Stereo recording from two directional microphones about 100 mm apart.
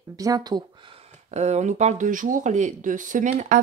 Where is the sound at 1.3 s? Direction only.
90° right.